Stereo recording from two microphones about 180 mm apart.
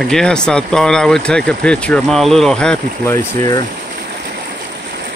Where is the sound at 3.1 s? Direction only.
20° left (ahead or behind).